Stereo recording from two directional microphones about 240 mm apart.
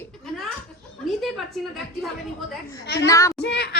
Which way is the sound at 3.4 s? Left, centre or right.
Left.